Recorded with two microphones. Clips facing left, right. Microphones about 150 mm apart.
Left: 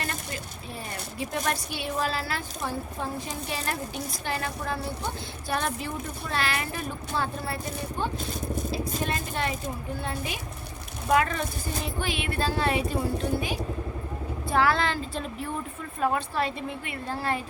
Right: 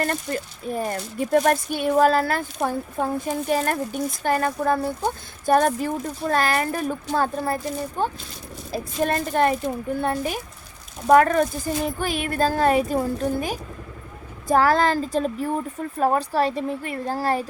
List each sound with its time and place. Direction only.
0.0 s speech: 50° right (ahead or behind)
14.4 s speech: 40° right (ahead or behind)